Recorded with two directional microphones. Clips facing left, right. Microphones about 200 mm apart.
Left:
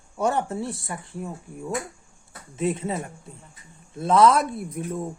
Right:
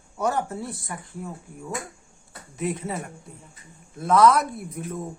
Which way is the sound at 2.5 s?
25° left (ahead or behind).